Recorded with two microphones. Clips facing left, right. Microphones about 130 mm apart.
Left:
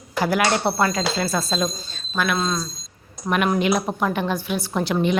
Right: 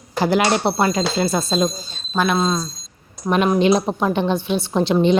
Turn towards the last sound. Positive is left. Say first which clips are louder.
# right 5 dB
turn(degrees=-25)  # may be behind; listen again after turning